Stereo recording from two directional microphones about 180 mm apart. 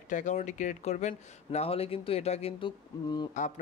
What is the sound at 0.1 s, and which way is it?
Speech, 45° left (ahead or behind).